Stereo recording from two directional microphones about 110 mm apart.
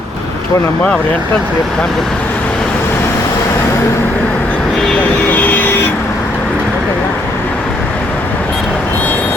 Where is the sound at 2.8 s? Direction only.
25° left (ahead or behind).